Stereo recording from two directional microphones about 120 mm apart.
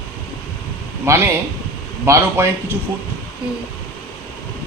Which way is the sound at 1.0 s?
25° right (ahead or behind).